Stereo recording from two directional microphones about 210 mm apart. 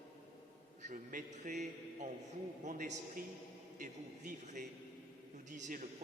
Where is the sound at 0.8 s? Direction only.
40° right (ahead or behind).